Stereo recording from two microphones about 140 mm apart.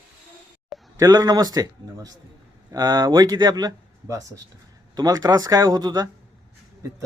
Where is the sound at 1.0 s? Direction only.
25° right (ahead or behind).